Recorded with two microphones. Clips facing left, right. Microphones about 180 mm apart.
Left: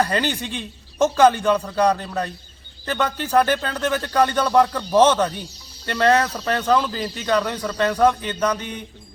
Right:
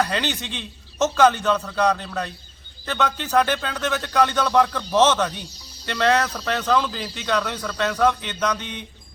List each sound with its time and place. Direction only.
0.0 s speech: 10° left (ahead or behind)